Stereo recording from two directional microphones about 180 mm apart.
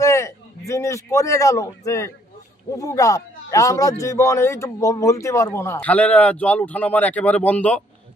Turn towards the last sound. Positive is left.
turn(degrees=10)  # may be behind; listen again after turning